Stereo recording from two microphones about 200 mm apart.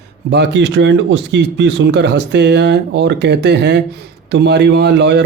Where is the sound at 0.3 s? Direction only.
60° right (ahead or behind).